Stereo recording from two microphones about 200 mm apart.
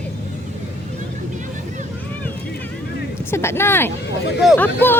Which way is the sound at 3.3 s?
10° left (ahead or behind).